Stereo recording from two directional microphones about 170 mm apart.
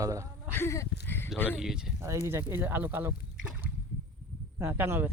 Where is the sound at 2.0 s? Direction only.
15° right (ahead or behind).